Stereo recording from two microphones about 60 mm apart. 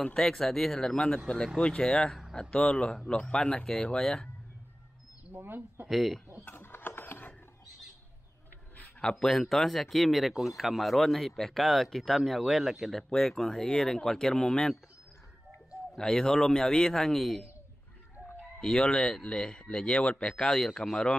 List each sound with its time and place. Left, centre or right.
0.0 s speech: centre
5.3 s speech: right
5.9 s speech: centre
6.4 s a sound: left
9.0 s speech: centre
13.2 s speech: centre
16.0 s speech: centre
18.6 s speech: centre